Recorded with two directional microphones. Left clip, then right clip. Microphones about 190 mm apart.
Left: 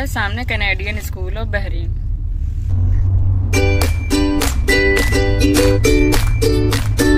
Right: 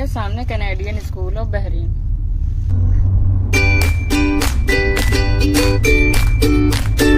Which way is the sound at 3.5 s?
Centre (ahead or behind).